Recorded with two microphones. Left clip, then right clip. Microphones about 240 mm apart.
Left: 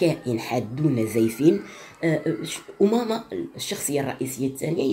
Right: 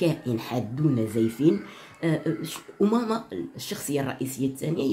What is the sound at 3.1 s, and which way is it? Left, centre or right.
Speech, right.